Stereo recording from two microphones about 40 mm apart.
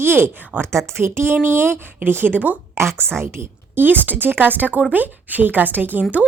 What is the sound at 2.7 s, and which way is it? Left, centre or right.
A woman's voice, right.